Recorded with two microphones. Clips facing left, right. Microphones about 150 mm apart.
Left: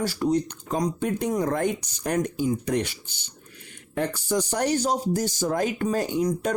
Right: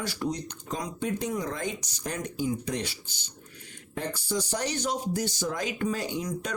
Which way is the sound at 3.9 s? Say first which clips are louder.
Left 6 dB; 60° left (ahead or behind).